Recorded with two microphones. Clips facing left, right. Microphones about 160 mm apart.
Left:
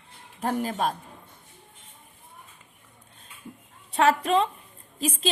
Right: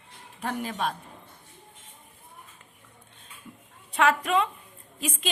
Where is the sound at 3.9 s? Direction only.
30° left (ahead or behind).